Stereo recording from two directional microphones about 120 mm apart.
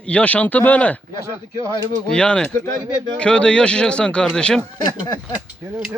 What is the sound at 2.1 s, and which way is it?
Speech, 5° left (ahead or behind).